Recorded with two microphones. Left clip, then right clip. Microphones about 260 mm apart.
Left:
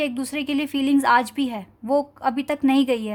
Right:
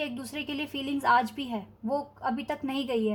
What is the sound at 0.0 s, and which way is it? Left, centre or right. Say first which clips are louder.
A woman's voice: left 9 dB; left.